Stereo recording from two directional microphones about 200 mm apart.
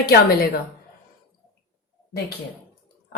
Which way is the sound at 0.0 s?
50° left (ahead or behind).